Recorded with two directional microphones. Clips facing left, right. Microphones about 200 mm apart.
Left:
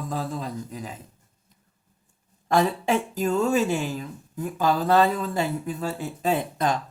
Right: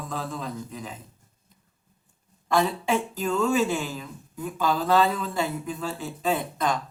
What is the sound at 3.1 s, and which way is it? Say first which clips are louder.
Speech: left 1 dB; 40° left (ahead or behind).